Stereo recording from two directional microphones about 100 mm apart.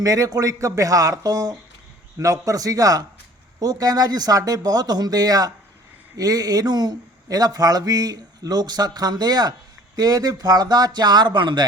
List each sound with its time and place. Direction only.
0.0 s speech: 35° right (ahead or behind)